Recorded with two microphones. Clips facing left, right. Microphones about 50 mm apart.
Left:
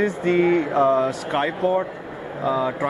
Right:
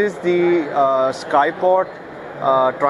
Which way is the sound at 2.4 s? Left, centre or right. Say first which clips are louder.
Right 7 dB; right.